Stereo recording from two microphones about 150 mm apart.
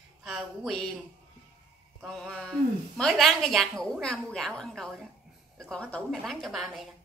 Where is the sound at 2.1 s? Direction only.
5° left (ahead or behind).